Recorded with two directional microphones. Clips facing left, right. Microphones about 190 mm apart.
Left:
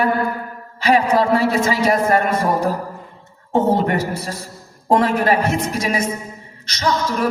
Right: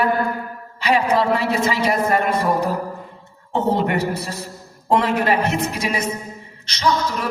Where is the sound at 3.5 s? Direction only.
45° left (ahead or behind).